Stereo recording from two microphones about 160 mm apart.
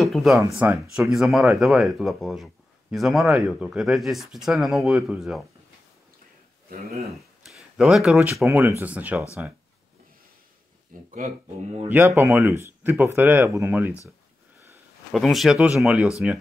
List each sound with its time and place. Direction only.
0.0 s a sound: centre (ahead or behind)
0.6 s speech: 10° right (ahead or behind)
7.4 s a sound: centre (ahead or behind)
8.5 s speech: 15° right (ahead or behind)
11.1 s speech: 45° right (ahead or behind)
12.2 s speech: 15° right (ahead or behind)
15.1 s speech: centre (ahead or behind)